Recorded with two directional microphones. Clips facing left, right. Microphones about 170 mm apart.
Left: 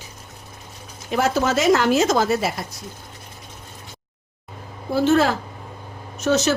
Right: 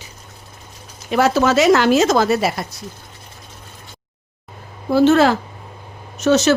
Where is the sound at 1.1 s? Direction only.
85° right.